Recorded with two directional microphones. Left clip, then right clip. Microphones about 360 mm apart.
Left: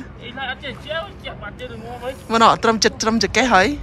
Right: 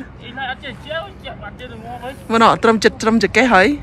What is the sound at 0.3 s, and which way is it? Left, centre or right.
Speech, centre.